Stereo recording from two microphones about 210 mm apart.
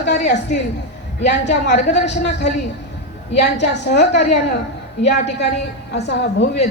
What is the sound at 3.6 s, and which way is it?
Speech, 55° left (ahead or behind).